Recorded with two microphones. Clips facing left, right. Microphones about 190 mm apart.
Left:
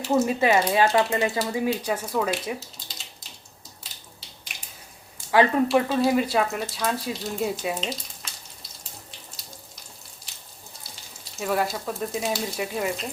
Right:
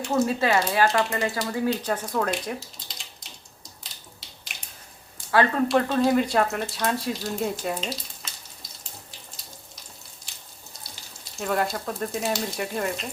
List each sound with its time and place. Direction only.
0.0 s speech: 5° left (ahead or behind)
0.3 s speech: 15° left (ahead or behind)
5.3 s speech: 15° left (ahead or behind)
5.6 s speech: 5° left (ahead or behind)
11.3 s speech: centre (ahead or behind)